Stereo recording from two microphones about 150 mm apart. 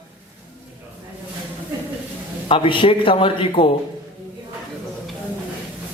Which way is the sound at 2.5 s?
35° left (ahead or behind).